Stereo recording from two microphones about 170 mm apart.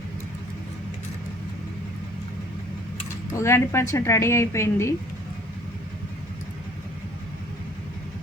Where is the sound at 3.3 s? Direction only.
15° left (ahead or behind).